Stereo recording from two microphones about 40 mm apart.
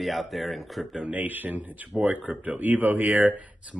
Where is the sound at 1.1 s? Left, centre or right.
Right.